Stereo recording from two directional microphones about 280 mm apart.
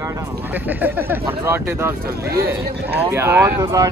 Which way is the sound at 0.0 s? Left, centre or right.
Centre.